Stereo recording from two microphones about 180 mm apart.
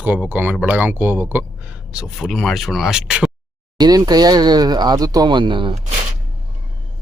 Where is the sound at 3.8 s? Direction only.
20° right (ahead or behind).